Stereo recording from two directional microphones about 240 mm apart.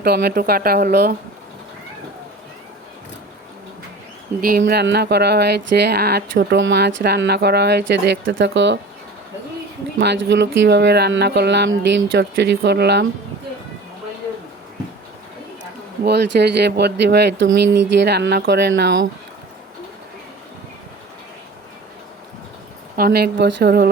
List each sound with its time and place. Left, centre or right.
0.0 s speech: right
4.4 s speech: right
10.0 s speech: right
16.0 s speech: right
23.0 s speech: right